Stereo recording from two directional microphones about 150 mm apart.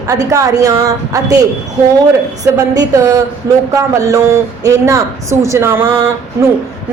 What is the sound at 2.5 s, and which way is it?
A woman's voice, 20° right (ahead or behind).